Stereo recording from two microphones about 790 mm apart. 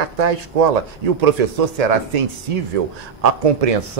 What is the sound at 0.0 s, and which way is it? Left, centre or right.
Speech, right.